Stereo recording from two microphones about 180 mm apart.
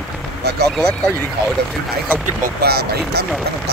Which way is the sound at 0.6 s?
5° left (ahead or behind).